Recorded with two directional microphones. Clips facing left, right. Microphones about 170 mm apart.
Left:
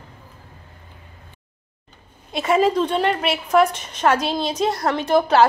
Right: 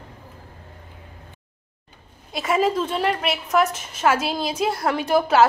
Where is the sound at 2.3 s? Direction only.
Centre (ahead or behind).